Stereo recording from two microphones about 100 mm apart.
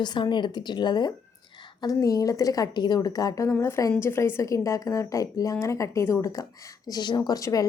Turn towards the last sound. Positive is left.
turn(degrees=35)  # may be behind; listen again after turning